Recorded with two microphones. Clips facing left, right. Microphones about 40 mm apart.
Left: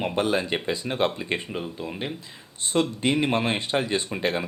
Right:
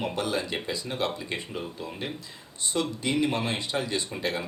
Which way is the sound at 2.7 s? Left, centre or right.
Left.